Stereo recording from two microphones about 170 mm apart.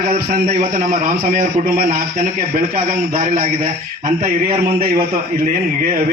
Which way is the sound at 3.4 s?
55° right (ahead or behind).